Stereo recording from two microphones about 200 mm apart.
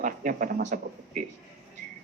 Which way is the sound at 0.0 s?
45° right (ahead or behind).